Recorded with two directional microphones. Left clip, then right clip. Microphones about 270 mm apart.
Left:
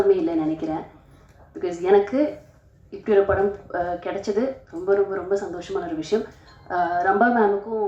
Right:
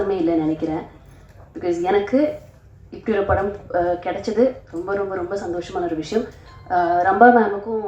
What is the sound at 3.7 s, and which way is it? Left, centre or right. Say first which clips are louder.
A woman's voice: right 5 dB; left.